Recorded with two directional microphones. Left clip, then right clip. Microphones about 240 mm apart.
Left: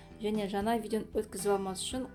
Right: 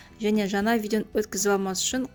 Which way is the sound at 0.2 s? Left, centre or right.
Right.